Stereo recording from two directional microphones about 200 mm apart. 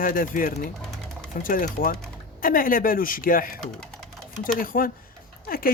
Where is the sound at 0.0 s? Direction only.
45° left (ahead or behind).